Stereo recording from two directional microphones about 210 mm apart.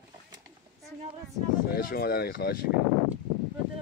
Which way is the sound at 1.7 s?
45° left (ahead or behind).